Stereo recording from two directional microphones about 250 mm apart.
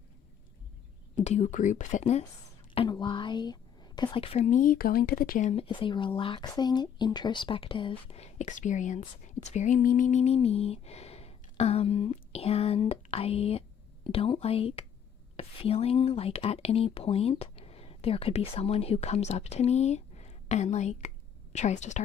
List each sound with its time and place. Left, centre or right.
1.2 s a woman's voice: left